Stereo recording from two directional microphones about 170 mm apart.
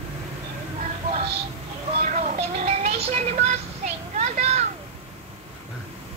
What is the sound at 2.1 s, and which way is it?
Music, 40° right (ahead or behind).